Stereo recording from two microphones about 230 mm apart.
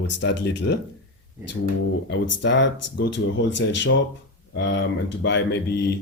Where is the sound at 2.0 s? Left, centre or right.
Left.